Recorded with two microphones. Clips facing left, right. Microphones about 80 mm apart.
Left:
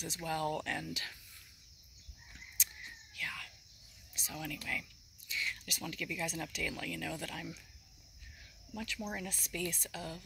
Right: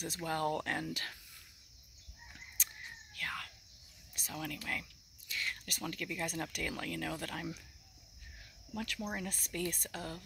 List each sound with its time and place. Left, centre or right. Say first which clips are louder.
0.0 s speech: right 1 dB; right
2.3 s a sound: even; right
3.2 s cricket: right 2 dB; right
4.1 s speech: right 1 dB; right
8.7 s speech: right 2 dB; right
9.0 s speech: even; right
9.3 s speech: right 1 dB; right